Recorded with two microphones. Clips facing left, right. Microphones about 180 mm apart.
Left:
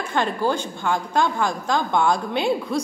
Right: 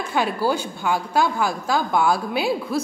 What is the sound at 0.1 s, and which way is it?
A woman's voice, 10° right (ahead or behind).